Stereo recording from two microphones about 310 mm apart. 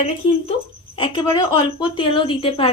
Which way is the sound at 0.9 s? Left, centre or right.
Centre.